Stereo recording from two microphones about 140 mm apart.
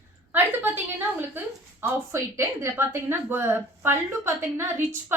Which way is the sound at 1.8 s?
20° right (ahead or behind).